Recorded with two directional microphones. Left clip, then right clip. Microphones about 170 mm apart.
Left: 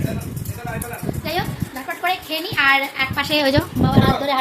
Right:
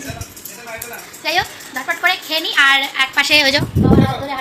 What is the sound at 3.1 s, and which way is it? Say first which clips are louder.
Speech: right 9 dB; 15° left (ahead or behind).